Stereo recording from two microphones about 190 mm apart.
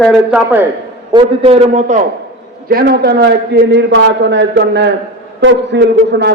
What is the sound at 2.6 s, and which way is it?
A man's voice, 50° right (ahead or behind).